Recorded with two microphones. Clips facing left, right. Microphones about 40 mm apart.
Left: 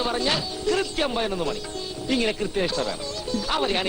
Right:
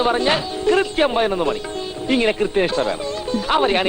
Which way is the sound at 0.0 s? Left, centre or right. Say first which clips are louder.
Right 7 dB; right.